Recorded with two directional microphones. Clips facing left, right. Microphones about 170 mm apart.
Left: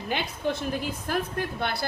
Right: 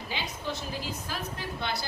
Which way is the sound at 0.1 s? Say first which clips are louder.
Left 7 dB; 55° left (ahead or behind).